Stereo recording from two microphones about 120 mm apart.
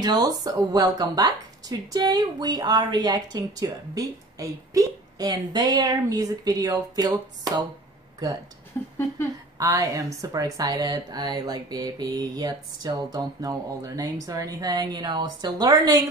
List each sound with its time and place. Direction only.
0.0 s speech: 30° right (ahead or behind)
8.8 s speech: 20° left (ahead or behind)
9.6 s speech: 25° right (ahead or behind)